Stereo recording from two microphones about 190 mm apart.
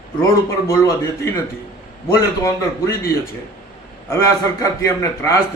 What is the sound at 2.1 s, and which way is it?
A man's voice, 15° left (ahead or behind).